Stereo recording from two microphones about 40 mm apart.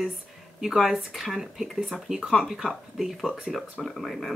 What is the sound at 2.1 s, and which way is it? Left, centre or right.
Speech, centre.